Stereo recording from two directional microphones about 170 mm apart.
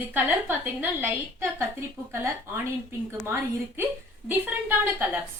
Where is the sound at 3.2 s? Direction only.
10° right (ahead or behind).